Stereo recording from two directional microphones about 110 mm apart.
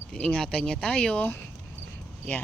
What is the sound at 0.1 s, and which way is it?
Speech, 10° left (ahead or behind).